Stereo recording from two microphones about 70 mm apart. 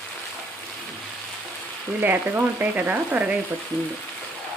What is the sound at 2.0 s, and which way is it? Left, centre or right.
Frying, right.